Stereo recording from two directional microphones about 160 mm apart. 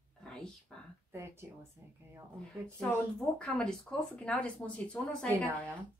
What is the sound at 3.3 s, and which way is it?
A woman's voice, 5° left (ahead or behind).